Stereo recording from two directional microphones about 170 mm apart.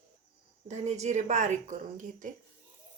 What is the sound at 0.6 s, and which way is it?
A woman's voice, 45° right (ahead or behind).